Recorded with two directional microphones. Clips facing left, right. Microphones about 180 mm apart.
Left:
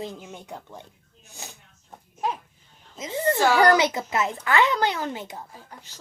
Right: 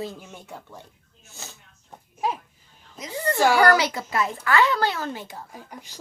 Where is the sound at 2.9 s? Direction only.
25° left (ahead or behind).